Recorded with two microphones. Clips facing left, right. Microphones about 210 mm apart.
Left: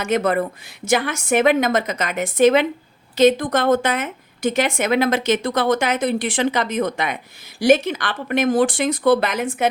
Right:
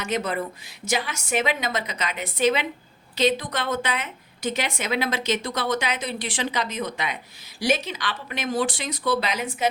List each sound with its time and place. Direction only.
0.0 s a woman's voice: 55° left (ahead or behind)